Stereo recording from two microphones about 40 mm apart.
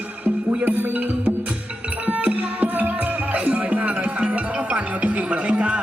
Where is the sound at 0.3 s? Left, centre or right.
Right.